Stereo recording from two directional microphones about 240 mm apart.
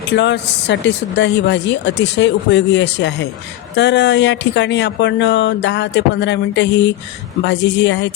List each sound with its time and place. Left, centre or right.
0.1 s speech: left